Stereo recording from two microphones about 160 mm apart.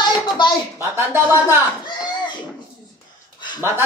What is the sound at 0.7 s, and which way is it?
Speech, 15° right (ahead or behind).